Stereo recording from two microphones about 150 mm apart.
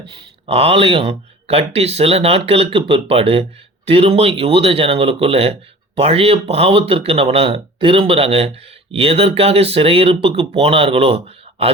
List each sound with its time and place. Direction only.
0.4 s speech: 40° right (ahead or behind)